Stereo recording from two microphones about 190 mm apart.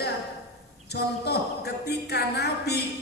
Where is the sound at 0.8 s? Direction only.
60° left (ahead or behind).